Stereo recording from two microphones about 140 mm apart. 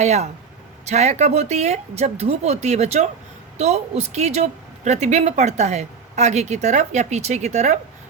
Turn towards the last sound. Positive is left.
turn(degrees=-55)  # may be behind; listen again after turning